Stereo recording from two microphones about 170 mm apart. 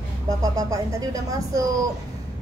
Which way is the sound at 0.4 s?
20° right (ahead or behind).